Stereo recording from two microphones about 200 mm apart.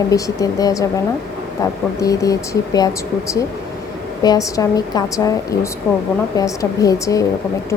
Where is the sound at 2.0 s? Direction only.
15° left (ahead or behind).